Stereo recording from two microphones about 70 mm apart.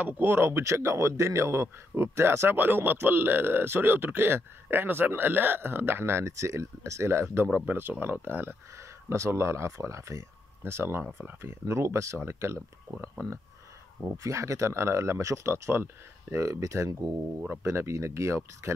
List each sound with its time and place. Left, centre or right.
0.0 s speech: right
0.4 s speech: right
7.5 s speech: right
9.1 s speech: right